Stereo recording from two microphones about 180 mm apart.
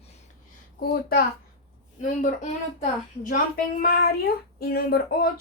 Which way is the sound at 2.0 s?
45° left (ahead or behind).